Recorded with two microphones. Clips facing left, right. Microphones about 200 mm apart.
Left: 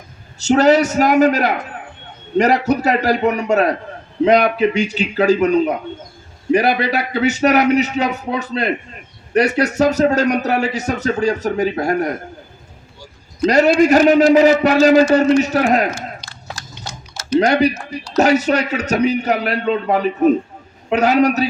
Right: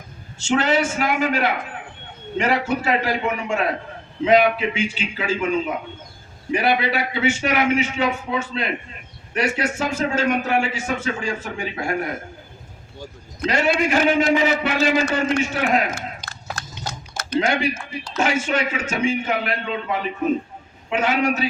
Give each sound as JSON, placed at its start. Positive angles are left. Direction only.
{"t": 0.3, "sound": "speech", "side_deg": 40}
{"t": 13.4, "sound": "speech", "side_deg": 40}
{"t": 17.4, "sound": "speech", "side_deg": 40}